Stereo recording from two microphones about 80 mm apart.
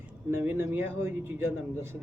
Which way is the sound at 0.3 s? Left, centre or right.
Right.